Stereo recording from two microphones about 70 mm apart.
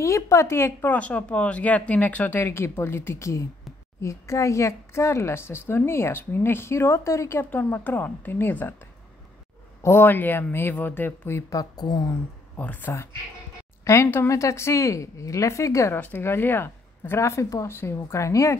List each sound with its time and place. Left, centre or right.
0.0 s speech: left
0.9 s speech: centre; by 7.4 s left
7.4 s speech: left
9.8 s speech: left
11.5 s speech: left
12.5 s speech: left
14.3 s a woman's voice: left
15.9 s a woman's voice: left